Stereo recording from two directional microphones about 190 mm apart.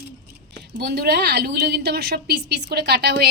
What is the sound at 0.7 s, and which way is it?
A woman's voice, 55° right (ahead or behind).